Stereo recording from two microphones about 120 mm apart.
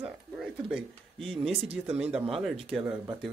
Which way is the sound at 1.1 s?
5° left (ahead or behind).